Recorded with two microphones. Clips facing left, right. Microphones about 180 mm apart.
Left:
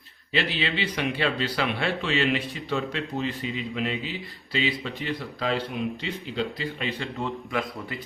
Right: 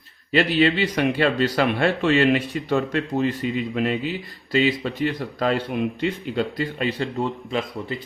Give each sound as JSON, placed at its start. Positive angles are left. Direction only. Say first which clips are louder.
{"t": 0.3, "sound": "speech", "louder": "right 9 dB", "side_deg": -45}